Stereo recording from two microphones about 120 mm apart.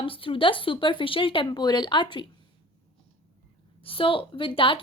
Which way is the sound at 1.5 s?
35° left (ahead or behind).